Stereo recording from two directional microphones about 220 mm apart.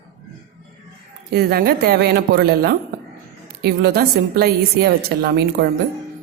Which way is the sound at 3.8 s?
45° right (ahead or behind).